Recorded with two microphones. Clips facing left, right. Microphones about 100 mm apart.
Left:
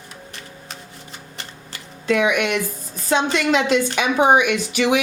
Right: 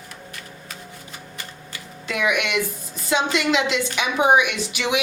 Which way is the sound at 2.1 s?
35° left (ahead or behind).